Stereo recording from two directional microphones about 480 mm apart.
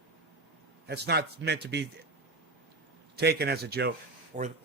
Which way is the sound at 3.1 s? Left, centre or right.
Centre.